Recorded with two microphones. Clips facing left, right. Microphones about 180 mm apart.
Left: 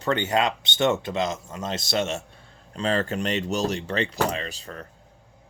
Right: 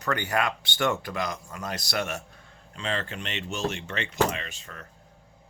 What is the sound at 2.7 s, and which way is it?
Speech, 40° left (ahead or behind).